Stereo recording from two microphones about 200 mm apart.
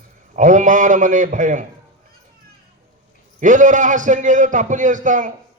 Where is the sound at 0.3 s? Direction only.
40° right (ahead or behind).